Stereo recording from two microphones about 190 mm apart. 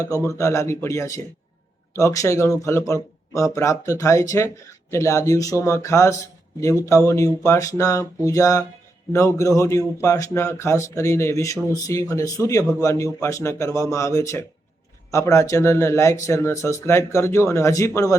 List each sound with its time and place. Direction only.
0.3 s speech: 15° left (ahead or behind)